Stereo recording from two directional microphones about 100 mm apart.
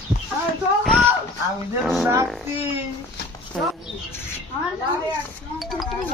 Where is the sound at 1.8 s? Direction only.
5° right (ahead or behind).